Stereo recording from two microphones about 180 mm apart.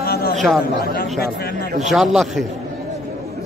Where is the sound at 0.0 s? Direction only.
55° left (ahead or behind).